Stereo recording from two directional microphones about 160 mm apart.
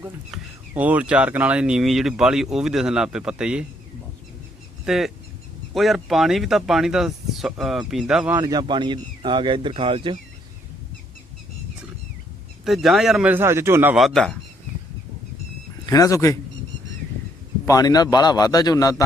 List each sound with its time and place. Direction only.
0.7 s speech: 10° right (ahead or behind)
4.9 s speech: centre (ahead or behind)
8.4 s speech: 25° right (ahead or behind)
12.6 s speech: centre (ahead or behind)
13.9 s speech: centre (ahead or behind)
15.9 s a man's voice: 20° left (ahead or behind)
17.7 s a man's voice: 25° left (ahead or behind)